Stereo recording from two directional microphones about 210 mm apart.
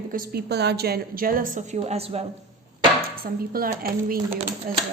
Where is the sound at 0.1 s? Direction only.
45° right (ahead or behind); by 2.2 s 30° right (ahead or behind).